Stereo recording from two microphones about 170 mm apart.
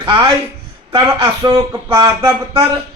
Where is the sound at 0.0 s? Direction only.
30° right (ahead or behind).